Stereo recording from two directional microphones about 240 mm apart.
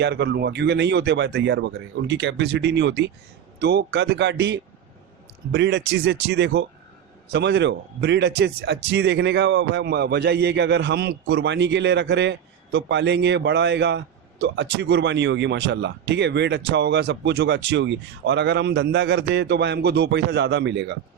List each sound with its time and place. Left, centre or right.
0.0 s a man's voice: right